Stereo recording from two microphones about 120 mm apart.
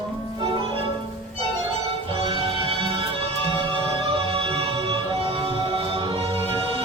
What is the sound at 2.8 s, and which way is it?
Music, 50° right (ahead or behind).